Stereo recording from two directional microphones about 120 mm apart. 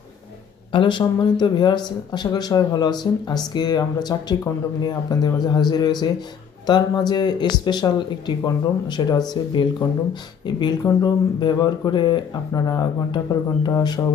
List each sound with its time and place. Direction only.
0.7 s speech: 45° left (ahead or behind)